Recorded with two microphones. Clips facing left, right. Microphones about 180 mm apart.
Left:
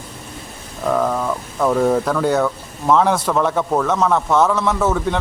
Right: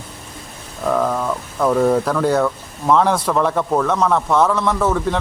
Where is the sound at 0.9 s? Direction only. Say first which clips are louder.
Even; centre (ahead or behind).